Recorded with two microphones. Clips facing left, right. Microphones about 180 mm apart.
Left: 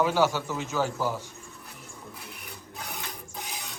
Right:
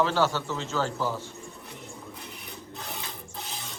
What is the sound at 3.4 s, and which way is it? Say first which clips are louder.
Mechanisms: left 1 dB; 15° left (ahead or behind).